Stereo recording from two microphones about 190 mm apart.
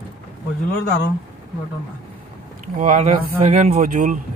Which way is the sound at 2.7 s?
40° right (ahead or behind).